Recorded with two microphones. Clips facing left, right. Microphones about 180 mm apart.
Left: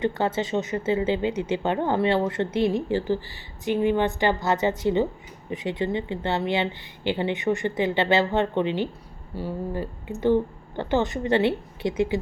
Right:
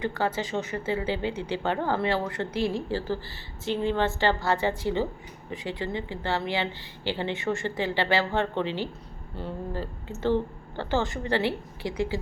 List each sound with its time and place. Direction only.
0.0 s a woman's voice: 25° left (ahead or behind)